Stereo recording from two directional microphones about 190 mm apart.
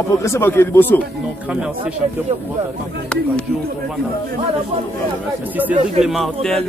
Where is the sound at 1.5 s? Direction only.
5° right (ahead or behind).